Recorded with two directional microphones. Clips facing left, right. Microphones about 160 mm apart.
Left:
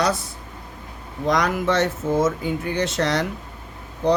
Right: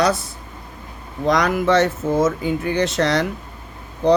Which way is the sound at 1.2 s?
90° right.